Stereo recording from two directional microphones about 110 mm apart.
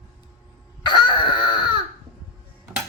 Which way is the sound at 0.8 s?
45° left (ahead or behind).